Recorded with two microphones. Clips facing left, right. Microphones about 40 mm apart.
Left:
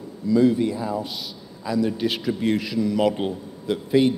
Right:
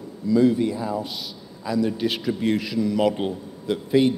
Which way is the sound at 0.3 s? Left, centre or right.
Centre.